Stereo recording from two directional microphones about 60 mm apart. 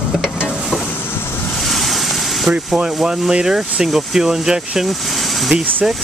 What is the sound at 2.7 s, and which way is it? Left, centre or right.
Speech, centre.